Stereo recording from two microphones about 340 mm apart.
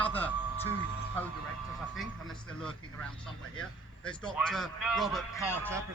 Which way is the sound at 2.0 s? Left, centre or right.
Centre.